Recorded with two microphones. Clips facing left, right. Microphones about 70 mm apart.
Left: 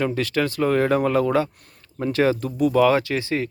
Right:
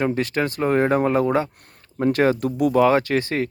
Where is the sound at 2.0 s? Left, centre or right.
Right.